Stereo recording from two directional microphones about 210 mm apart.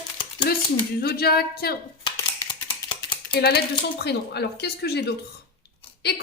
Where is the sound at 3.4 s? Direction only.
50° left (ahead or behind).